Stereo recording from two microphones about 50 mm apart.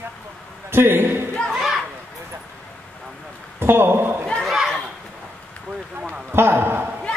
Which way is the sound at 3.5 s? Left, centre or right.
Right.